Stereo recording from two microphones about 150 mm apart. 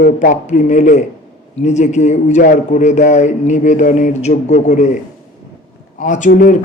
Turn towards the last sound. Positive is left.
turn(degrees=55)  # may be behind; listen again after turning